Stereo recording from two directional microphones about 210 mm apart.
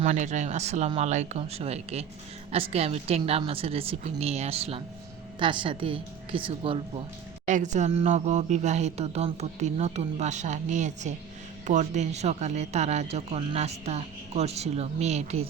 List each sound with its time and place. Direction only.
0.0 s a woman's voice: 35° right (ahead or behind)
7.4 s speech: 35° right (ahead or behind)